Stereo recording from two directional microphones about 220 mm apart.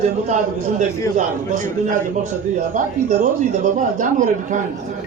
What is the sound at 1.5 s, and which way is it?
Speech, 35° right (ahead or behind).